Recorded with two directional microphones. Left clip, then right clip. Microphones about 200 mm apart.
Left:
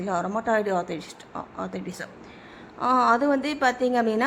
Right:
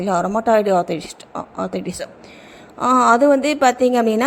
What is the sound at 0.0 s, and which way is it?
A woman's voice, 25° right (ahead or behind).